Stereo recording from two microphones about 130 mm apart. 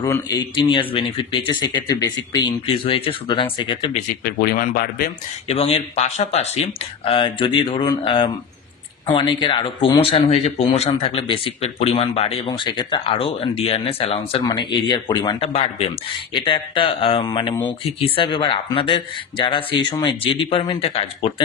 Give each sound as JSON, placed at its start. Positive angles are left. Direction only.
{"t": 0.0, "sound": "speech", "side_deg": 25}
{"t": 3.9, "sound": "speech", "side_deg": 90}
{"t": 5.5, "sound": "speech", "side_deg": 50}
{"t": 12.4, "sound": "speech", "side_deg": 35}
{"t": 14.4, "sound": "speech", "side_deg": 35}
{"t": 15.5, "sound": "speech", "side_deg": 50}